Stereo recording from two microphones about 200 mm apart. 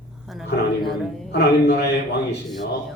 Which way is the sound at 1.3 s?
55° left (ahead or behind).